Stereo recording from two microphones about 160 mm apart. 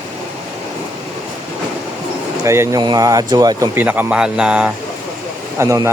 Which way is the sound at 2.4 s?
20° right (ahead or behind).